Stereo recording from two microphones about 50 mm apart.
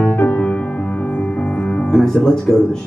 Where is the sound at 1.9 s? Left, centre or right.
Centre.